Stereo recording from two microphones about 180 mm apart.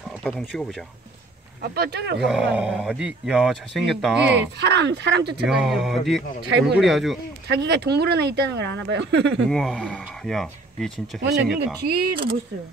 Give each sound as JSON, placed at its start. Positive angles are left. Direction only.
{"t": 0.2, "sound": "speech", "side_deg": 0}
{"t": 1.6, "sound": "speech", "side_deg": -60}
{"t": 2.5, "sound": "speech", "side_deg": -5}
{"t": 4.6, "sound": "speech", "side_deg": -70}
{"t": 5.5, "sound": "speech", "side_deg": 0}
{"t": 7.4, "sound": "speech", "side_deg": -70}
{"t": 9.5, "sound": "speech", "side_deg": 5}
{"t": 11.2, "sound": "speech", "side_deg": -65}